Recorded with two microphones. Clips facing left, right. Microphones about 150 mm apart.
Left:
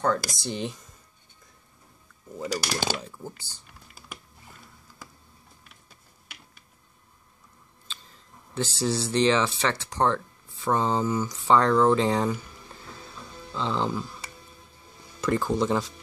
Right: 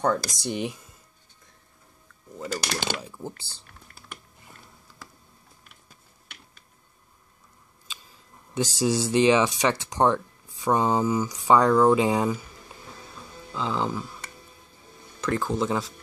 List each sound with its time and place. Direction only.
0.0 s speech: 15° right (ahead or behind)
2.3 s speech: 5° left (ahead or behind)
3.0 s speech: 10° right (ahead or behind)
3.6 s typing: 5° left (ahead or behind)
8.7 s speech: 15° right (ahead or behind)
13.5 s speech: 5° right (ahead or behind)